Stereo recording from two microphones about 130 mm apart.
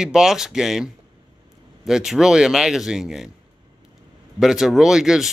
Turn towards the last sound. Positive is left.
turn(degrees=-5)  # may be behind; listen again after turning